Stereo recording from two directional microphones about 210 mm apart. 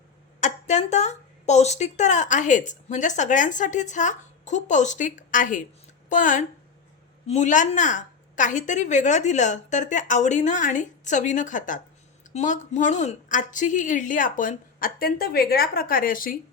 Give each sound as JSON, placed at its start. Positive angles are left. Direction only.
{"t": 0.3, "sound": "a woman's voice", "side_deg": 35}